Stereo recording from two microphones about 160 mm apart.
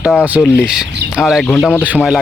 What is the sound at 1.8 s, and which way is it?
Speech, 5° right (ahead or behind).